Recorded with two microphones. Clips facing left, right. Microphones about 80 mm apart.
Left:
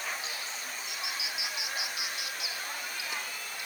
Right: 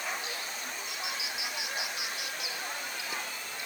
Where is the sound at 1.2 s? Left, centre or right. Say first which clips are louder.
Even; left.